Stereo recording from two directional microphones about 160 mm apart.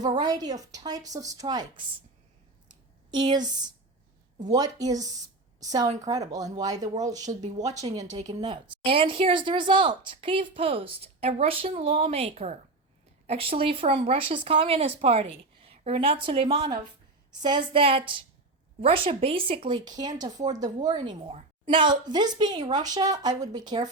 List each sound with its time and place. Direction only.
0.0 s a woman's voice: 25° right (ahead or behind)
2.6 s a sound: 25° right (ahead or behind)
3.3 s a woman's voice: 25° right (ahead or behind)
7.3 s speech: 45° right (ahead or behind)
8.4 s a woman's voice: 30° right (ahead or behind)